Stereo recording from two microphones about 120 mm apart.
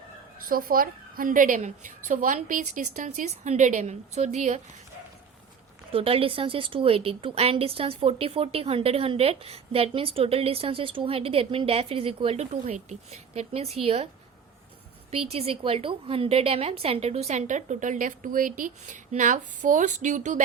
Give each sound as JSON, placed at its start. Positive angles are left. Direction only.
{"t": 1.3, "sound": "a woman's voice", "side_deg": -90}
{"t": 5.9, "sound": "a woman's voice", "side_deg": -50}
{"t": 12.6, "sound": "a woman's voice", "side_deg": -70}
{"t": 15.1, "sound": "a woman's voice", "side_deg": -55}